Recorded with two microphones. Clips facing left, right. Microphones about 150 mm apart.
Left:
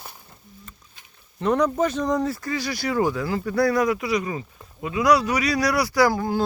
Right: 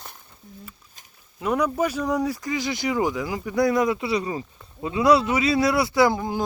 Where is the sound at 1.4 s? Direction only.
10° right (ahead or behind).